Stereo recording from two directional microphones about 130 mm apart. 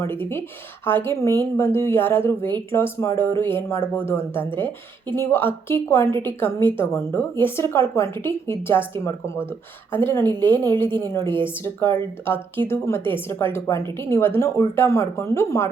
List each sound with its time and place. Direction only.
0.0 s a woman's voice: 20° left (ahead or behind)